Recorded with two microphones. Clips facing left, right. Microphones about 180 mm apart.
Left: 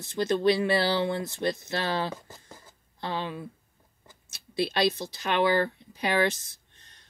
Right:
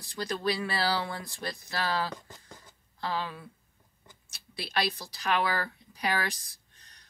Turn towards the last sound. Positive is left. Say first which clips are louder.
# left 2 dB
turn(degrees=25)  # may be behind; listen again after turning